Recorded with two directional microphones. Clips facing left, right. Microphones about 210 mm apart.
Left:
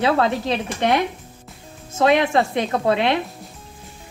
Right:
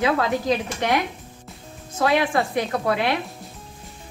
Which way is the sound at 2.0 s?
20° left (ahead or behind).